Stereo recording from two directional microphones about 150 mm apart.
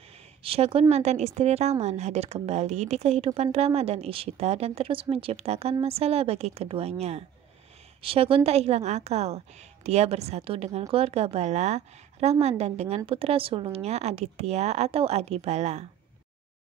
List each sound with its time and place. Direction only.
0.4 s a woman's voice: 40° right (ahead or behind)